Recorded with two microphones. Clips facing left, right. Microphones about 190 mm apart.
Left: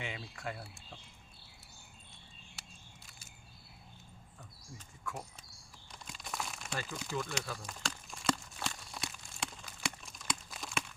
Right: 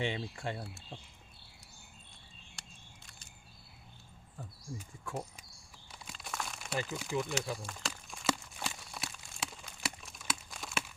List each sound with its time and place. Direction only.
0.0 s speech: 30° right (ahead or behind)
2.6 s a sound: 5° left (ahead or behind)
5.1 s speech: 30° right (ahead or behind)
5.9 s crumpling: 5° right (ahead or behind)
6.8 s speech: 5° right (ahead or behind)
7.8 s a sound: 5° right (ahead or behind)